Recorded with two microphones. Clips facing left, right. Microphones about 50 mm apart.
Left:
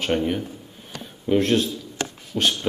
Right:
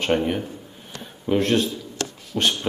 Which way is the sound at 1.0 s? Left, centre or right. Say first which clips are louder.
Left 1 dB; centre.